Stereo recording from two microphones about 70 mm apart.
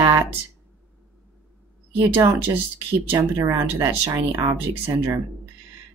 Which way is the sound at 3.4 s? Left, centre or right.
Right.